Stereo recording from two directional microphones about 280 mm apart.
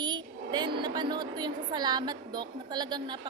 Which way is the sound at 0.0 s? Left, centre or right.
Centre.